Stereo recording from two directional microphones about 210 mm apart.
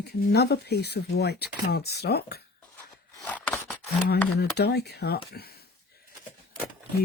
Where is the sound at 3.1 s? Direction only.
5° left (ahead or behind).